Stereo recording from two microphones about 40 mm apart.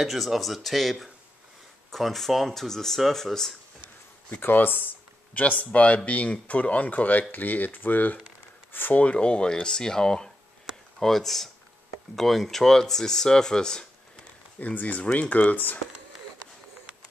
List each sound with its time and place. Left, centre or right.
0.0 s speech: centre
4.4 s a sound: left
5.4 s speech: left
9.0 s speech: left
14.6 s speech: left